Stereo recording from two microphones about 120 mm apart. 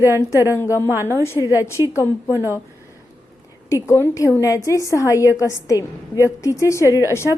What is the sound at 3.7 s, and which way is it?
A woman's voice, 25° left (ahead or behind).